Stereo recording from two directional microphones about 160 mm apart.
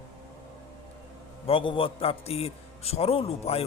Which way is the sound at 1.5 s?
35° left (ahead or behind).